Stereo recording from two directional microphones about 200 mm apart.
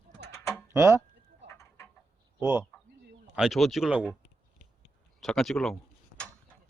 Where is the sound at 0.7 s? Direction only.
15° right (ahead or behind).